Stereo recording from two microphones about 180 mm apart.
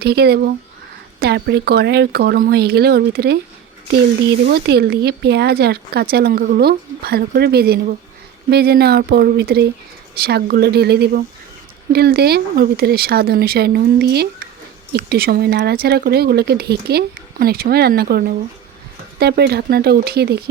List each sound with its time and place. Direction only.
0.0 s speech: 60° right (ahead or behind)
4.4 s speech: 65° right (ahead or behind)